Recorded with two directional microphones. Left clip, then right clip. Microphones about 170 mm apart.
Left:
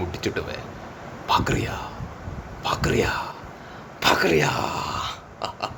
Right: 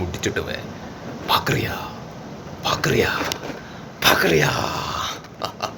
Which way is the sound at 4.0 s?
20° left (ahead or behind).